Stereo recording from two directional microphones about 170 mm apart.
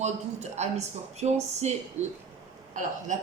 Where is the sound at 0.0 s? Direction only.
40° right (ahead or behind).